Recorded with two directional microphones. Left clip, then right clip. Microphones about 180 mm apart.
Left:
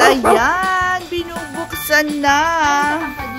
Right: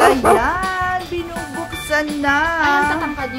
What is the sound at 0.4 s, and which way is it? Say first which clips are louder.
Child singing: left 3 dB; 30° left (ahead or behind).